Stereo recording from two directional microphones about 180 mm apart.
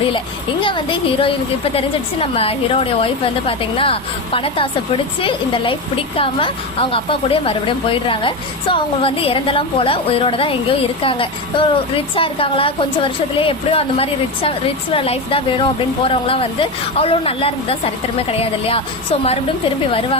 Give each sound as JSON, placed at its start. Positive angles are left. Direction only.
{"t": 0.6, "sound": "speech", "side_deg": 30}
{"t": 2.3, "sound": "a woman's voice", "side_deg": 35}
{"t": 6.1, "sound": "a woman's voice", "side_deg": 30}